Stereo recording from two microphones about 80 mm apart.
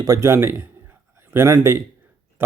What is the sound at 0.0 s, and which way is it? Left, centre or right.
Speech, right.